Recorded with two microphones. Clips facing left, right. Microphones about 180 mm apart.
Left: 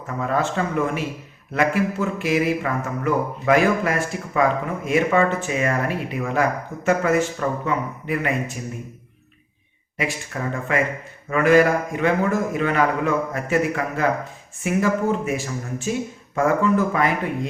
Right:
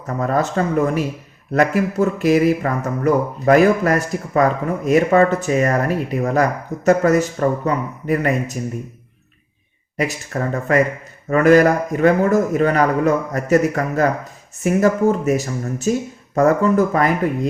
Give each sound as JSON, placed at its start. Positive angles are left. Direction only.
{"t": 0.2, "sound": "speech", "side_deg": -40}
{"t": 10.0, "sound": "speech", "side_deg": -40}